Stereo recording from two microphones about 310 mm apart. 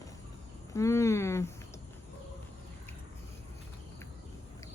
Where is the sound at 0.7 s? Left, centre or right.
Centre.